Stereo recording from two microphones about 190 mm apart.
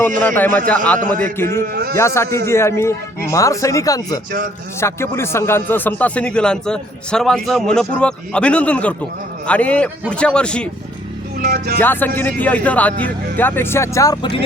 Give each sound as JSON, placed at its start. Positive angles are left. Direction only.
{"t": 0.2, "sound": "a man's voice", "side_deg": 10}
{"t": 1.7, "sound": "a sound", "side_deg": -55}
{"t": 2.0, "sound": "a man's voice", "side_deg": 15}
{"t": 11.3, "sound": "speech", "side_deg": -60}
{"t": 11.8, "sound": "a man's voice", "side_deg": 10}